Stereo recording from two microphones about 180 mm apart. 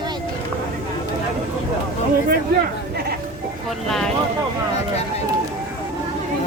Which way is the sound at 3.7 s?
Centre (ahead or behind).